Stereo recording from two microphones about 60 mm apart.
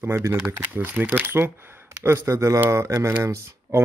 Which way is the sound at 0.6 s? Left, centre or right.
Right.